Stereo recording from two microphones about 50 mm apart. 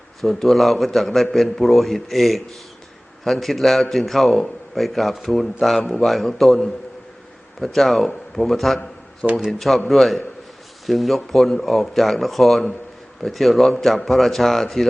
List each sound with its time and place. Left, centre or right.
0.2 s a man's voice: centre